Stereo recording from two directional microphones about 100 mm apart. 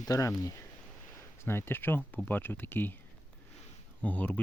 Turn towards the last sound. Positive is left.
turn(degrees=15)  # may be behind; listen again after turning